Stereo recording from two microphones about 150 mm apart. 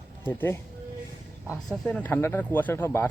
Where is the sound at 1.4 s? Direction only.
10° right (ahead or behind).